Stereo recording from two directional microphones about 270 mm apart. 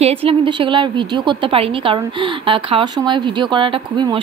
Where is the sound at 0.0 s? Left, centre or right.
Right.